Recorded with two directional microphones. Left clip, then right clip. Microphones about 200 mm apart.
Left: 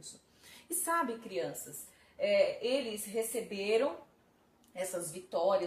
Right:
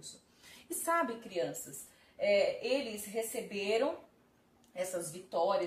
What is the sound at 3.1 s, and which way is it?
A woman's voice, 15° left (ahead or behind).